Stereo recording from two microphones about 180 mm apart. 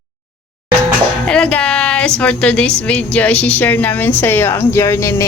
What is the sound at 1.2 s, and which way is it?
A woman's voice, 5° left (ahead or behind).